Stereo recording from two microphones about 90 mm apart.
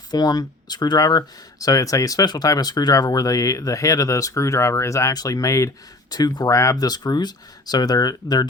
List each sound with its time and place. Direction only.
0.1 s speech: 50° left (ahead or behind)
6.1 s speech: 50° left (ahead or behind)